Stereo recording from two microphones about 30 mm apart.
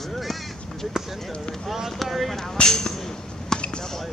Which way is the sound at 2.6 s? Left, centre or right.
Left.